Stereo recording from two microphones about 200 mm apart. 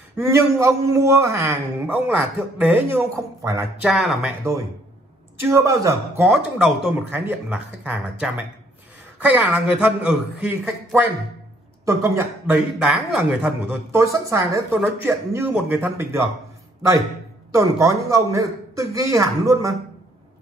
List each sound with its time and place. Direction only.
0.2 s speech: 15° right (ahead or behind)
3.8 s speech: centre (ahead or behind)
5.4 s speech: 15° right (ahead or behind)
17.5 s speech: 15° right (ahead or behind)